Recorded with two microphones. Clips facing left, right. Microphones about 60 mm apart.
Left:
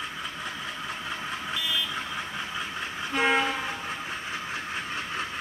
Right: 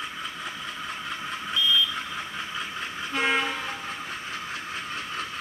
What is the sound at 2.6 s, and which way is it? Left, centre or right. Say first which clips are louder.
Train: even; centre.